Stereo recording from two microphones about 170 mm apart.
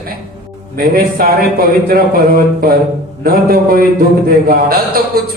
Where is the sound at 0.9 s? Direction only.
60° right (ahead or behind).